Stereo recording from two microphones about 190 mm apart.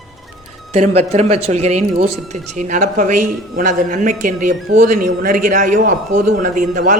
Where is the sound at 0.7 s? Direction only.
35° right (ahead or behind).